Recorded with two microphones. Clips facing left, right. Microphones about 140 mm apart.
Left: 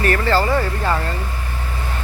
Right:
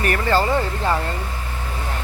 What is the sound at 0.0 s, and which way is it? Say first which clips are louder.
Speech: left 2 dB; 15° right (ahead or behind).